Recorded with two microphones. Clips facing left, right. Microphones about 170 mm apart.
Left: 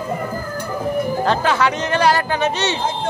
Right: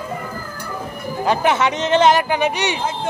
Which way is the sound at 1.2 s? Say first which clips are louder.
Right 3 dB; 15° right (ahead or behind).